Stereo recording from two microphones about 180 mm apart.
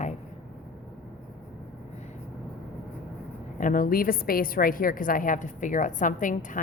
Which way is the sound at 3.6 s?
50° left (ahead or behind).